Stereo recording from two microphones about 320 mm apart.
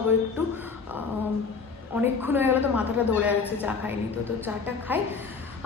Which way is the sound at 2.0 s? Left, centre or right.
Centre.